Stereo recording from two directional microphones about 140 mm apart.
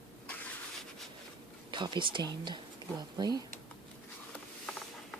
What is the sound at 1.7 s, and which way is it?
Speech, 35° right (ahead or behind).